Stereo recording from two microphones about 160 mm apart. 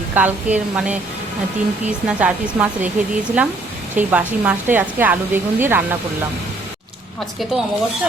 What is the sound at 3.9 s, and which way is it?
A woman's voice, 10° right (ahead or behind).